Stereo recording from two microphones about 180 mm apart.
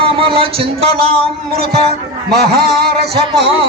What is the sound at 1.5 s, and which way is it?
Speech, 60° right (ahead or behind).